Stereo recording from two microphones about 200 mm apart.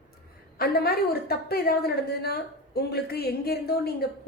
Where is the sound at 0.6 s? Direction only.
50° left (ahead or behind).